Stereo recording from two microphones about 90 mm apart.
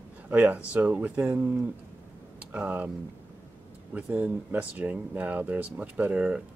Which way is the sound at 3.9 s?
20° right (ahead or behind).